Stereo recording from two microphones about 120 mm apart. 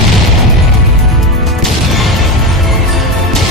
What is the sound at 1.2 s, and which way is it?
Music, centre (ahead or behind).